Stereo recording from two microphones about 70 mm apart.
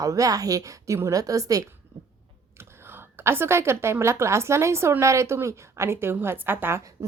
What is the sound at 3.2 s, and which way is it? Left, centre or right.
A woman's voice, right.